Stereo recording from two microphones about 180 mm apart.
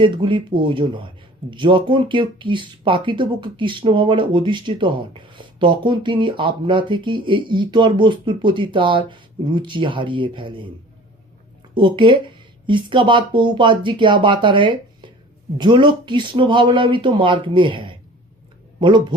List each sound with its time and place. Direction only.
0.0 s speech: 25° right (ahead or behind)
11.7 s speech: 25° right (ahead or behind)